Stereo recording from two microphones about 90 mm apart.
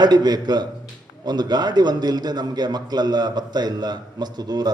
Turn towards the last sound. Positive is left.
turn(degrees=-50)  # may be behind; listen again after turning